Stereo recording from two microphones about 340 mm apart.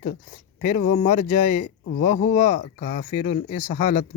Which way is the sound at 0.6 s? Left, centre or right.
Left.